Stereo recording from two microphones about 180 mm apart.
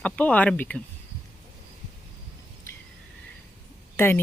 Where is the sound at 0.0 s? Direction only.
5° left (ahead or behind).